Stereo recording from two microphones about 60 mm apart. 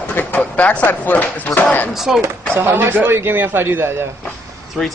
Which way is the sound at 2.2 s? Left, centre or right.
Right.